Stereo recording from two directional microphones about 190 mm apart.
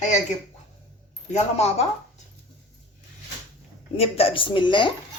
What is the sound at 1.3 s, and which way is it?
Speech, 35° left (ahead or behind).